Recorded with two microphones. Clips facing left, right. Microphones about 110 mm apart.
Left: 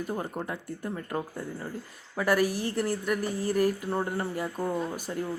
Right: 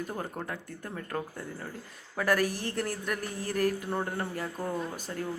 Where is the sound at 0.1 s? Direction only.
5° left (ahead or behind).